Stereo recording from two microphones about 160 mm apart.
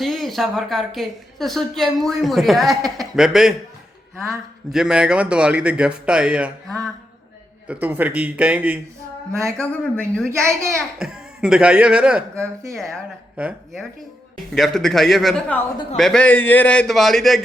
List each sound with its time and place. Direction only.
0.0 s a woman's voice: centre (ahead or behind)
7.7 s speech: 10° right (ahead or behind)
9.6 s speech: 5° left (ahead or behind)
10.2 s speech: 15° right (ahead or behind)
11.0 s a woman's voice: 5° right (ahead or behind)